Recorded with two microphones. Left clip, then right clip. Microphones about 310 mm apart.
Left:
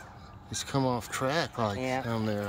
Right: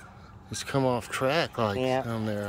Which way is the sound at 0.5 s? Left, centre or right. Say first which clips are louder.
Right 3 dB; centre.